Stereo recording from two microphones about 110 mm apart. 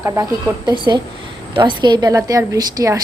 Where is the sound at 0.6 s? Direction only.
45° right (ahead or behind).